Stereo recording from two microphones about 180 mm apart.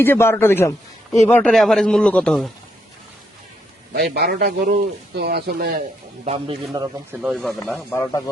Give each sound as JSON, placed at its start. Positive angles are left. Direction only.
{"t": 0.0, "sound": "a man's voice", "side_deg": 10}
{"t": 3.9, "sound": "a man's voice", "side_deg": -60}
{"t": 6.2, "sound": "a man's voice", "side_deg": -35}
{"t": 7.1, "sound": "speech", "side_deg": -5}
{"t": 7.9, "sound": "a man's voice", "side_deg": 15}